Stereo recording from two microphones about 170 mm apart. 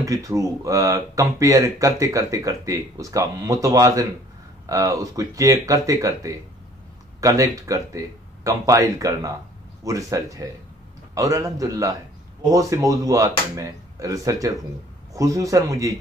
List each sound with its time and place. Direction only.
0.0 s speech: 20° right (ahead or behind)